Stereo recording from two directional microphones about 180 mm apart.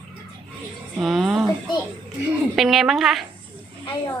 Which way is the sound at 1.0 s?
5° right (ahead or behind).